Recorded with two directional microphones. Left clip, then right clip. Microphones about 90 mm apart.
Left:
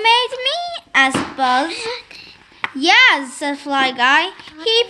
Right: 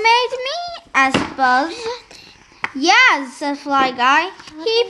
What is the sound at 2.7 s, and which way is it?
Chopping, 40° left (ahead or behind).